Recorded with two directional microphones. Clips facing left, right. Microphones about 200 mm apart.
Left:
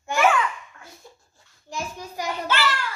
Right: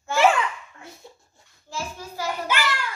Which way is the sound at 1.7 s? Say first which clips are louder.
Left 1 dB; 15° left (ahead or behind).